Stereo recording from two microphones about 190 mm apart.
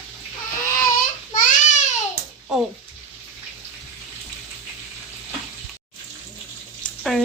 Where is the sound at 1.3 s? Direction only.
40° left (ahead or behind).